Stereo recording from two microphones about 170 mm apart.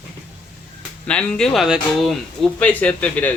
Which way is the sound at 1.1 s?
5° left (ahead or behind).